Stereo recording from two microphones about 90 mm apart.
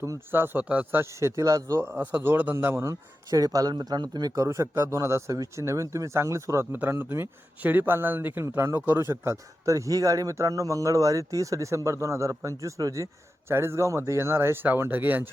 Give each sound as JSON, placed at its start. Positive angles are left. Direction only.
{"t": 0.0, "sound": "speech", "side_deg": -30}
{"t": 1.4, "sound": "speech", "side_deg": -40}
{"t": 1.8, "sound": "speech", "side_deg": -20}
{"t": 2.8, "sound": "speech", "side_deg": -40}
{"t": 4.4, "sound": "speech", "side_deg": -35}